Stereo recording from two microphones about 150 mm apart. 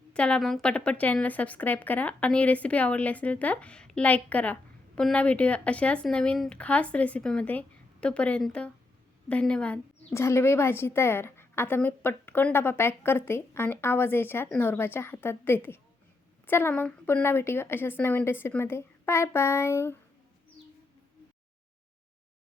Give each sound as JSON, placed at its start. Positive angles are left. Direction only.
{"t": 0.1, "sound": "speech", "side_deg": 5}